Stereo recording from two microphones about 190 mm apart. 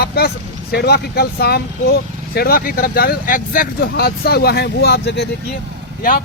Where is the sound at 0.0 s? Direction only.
55° left (ahead or behind).